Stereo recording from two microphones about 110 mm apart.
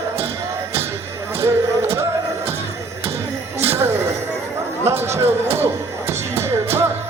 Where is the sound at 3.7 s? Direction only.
20° right (ahead or behind).